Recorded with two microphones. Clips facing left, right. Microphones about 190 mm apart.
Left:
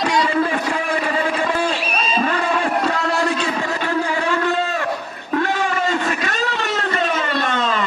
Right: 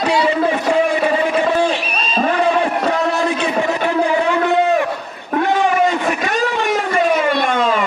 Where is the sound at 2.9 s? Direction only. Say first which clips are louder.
Right 3 dB; 20° right (ahead or behind).